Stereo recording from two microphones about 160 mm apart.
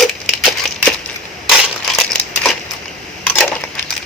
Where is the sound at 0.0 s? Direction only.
5° left (ahead or behind).